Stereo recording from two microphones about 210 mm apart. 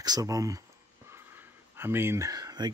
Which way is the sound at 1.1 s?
10° right (ahead or behind).